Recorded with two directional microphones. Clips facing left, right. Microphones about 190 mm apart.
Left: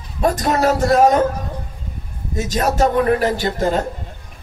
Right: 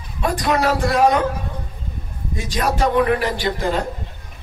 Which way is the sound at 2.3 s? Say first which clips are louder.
Left 3 dB; 45° left (ahead or behind).